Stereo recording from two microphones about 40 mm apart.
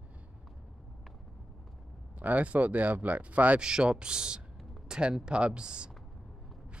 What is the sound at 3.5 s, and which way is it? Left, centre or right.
Speech, centre.